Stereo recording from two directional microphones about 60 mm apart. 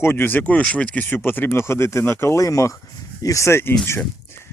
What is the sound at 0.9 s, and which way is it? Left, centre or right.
Speech, left.